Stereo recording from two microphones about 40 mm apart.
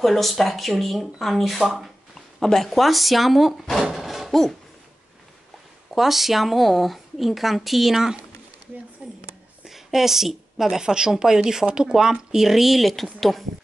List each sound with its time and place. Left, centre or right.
0.0 s speech: centre
2.1 s speech: centre
4.0 s a sound: centre
5.9 s speech: centre
9.0 s a sound: right
9.7 s a woman's voice: centre